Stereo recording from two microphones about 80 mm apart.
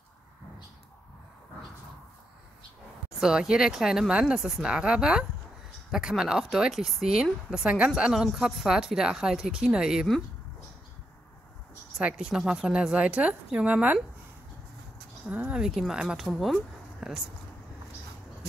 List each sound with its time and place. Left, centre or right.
3.2 s a woman's voice: centre
12.0 s a woman's voice: centre
15.2 s a woman's voice: centre
15.6 s speech: centre